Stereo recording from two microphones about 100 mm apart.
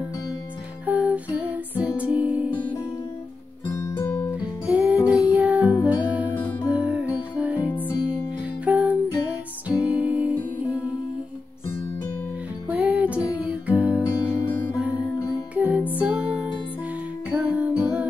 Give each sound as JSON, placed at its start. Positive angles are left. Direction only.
{"t": 0.8, "sound": "music", "side_deg": -15}
{"t": 3.7, "sound": "music", "side_deg": 30}
{"t": 4.6, "sound": "music", "side_deg": -15}
{"t": 12.6, "sound": "music", "side_deg": -15}
{"t": 14.0, "sound": "music", "side_deg": 40}
{"t": 14.8, "sound": "music", "side_deg": -15}